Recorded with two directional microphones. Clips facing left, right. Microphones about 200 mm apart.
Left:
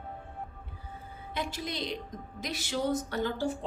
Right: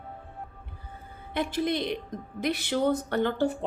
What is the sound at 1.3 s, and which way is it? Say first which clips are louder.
A woman's voice: right 8 dB; 55° right (ahead or behind).